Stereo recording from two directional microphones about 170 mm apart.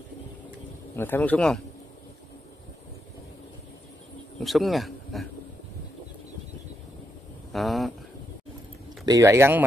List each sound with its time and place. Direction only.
0.9 s speech: 10° left (ahead or behind)
4.4 s speech: centre (ahead or behind)
7.5 s a sound: centre (ahead or behind)
9.0 s speech: 20° right (ahead or behind)